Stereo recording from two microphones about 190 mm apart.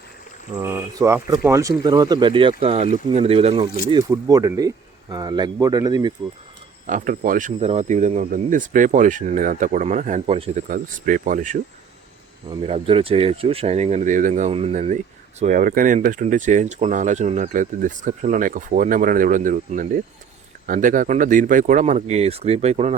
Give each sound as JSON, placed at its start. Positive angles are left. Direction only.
{"t": 0.6, "sound": "speech", "side_deg": -15}
{"t": 6.8, "sound": "speech", "side_deg": -45}
{"t": 10.7, "sound": "speech", "side_deg": -45}
{"t": 12.5, "sound": "speech", "side_deg": -30}